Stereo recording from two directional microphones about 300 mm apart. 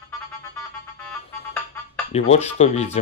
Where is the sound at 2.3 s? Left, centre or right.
Left.